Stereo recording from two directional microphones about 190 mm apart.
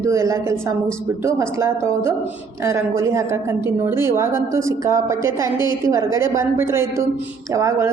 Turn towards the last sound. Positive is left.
turn(degrees=-15)  # may be behind; listen again after turning